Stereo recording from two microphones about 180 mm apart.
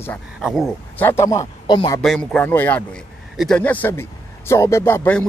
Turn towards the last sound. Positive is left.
turn(degrees=10)  # may be behind; listen again after turning